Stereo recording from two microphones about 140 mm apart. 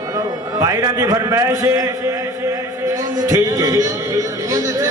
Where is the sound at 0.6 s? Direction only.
25° right (ahead or behind).